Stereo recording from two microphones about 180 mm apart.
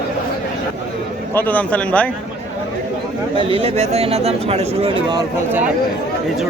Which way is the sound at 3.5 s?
35° right (ahead or behind).